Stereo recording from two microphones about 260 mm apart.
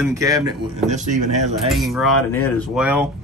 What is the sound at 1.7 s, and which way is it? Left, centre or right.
Speech, centre.